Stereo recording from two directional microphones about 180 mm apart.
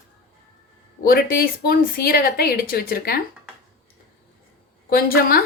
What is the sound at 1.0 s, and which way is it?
A woman's voice, 55° left (ahead or behind).